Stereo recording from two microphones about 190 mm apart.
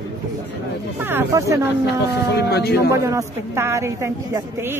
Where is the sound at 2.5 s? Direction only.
60° left (ahead or behind).